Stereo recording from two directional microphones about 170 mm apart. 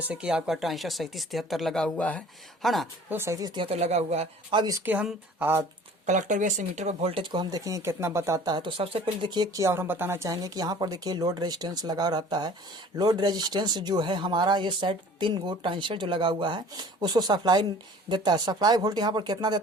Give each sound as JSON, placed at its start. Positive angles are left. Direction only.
{"t": 0.1, "sound": "speech", "side_deg": -5}
{"t": 3.1, "sound": "speech", "side_deg": -15}
{"t": 4.6, "sound": "speech", "side_deg": -20}
{"t": 4.9, "sound": "speech", "side_deg": -10}
{"t": 6.1, "sound": "speech", "side_deg": -45}